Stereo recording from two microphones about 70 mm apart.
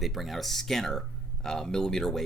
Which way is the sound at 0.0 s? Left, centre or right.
Centre.